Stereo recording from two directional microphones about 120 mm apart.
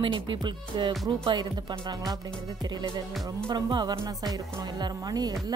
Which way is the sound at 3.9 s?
30° right (ahead or behind).